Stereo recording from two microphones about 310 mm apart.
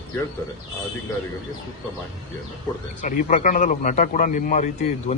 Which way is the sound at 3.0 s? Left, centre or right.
Left.